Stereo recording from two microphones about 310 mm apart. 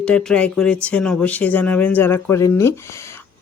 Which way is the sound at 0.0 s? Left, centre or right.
Centre.